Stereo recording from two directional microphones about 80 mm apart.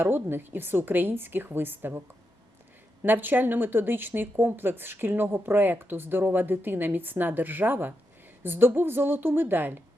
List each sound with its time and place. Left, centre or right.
0.0 s speech: right